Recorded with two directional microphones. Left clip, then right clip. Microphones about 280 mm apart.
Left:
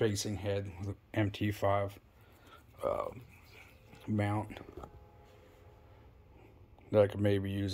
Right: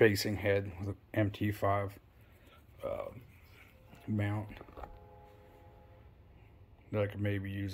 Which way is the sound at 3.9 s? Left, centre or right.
Centre.